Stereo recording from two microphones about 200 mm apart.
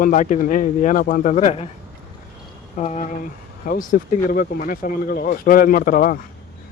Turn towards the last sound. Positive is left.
turn(degrees=45)  # may be behind; listen again after turning